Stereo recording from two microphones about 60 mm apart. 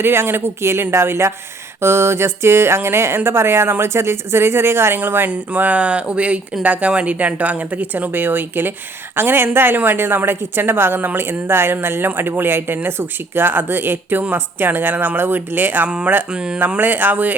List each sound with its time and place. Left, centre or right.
0.0 s a sound: right
3.2 s a woman's voice: right
16.3 s speech: centre
16.6 s a woman's voice: right